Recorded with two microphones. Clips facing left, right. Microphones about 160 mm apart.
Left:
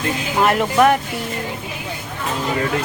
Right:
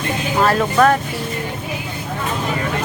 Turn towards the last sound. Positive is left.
turn(degrees=20)  # may be behind; listen again after turning